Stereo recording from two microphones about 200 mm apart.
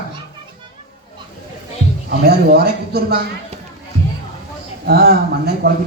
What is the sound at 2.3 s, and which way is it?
Speech, 50° right (ahead or behind).